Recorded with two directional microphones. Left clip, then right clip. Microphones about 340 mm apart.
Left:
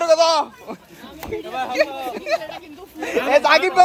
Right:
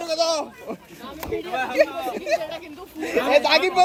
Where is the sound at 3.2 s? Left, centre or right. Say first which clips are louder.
Left 3 dB; centre.